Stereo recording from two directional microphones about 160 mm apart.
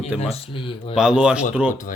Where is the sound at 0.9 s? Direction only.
5° right (ahead or behind).